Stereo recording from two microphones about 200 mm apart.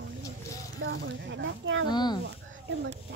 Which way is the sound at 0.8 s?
70° right (ahead or behind).